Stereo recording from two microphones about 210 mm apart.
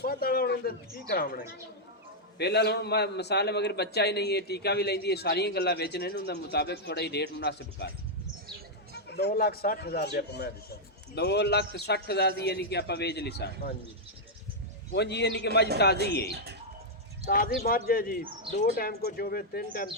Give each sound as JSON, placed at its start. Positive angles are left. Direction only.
{"t": 0.0, "sound": "a man's voice", "side_deg": 45}
{"t": 2.4, "sound": "a man's voice", "side_deg": 50}
{"t": 14.9, "sound": "a man's voice", "side_deg": 55}
{"t": 16.3, "sound": "speech", "side_deg": -50}
{"t": 17.2, "sound": "a man's voice", "side_deg": 40}